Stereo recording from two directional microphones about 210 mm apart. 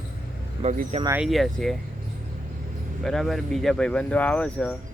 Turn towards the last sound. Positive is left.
turn(degrees=5)  # may be behind; listen again after turning